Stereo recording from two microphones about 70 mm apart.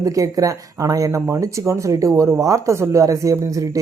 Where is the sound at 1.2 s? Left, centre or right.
Right.